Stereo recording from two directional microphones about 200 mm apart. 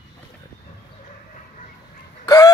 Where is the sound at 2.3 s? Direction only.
15° left (ahead or behind).